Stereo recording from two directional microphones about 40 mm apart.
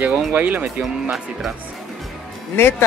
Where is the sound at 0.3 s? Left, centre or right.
Right.